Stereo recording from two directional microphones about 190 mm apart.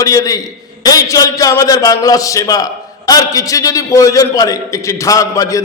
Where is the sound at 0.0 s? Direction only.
20° left (ahead or behind).